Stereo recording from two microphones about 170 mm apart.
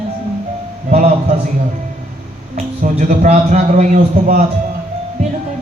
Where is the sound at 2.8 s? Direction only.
50° right (ahead or behind).